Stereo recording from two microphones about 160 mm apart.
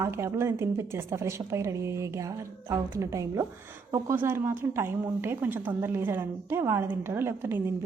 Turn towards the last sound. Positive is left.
turn(degrees=-15)  # may be behind; listen again after turning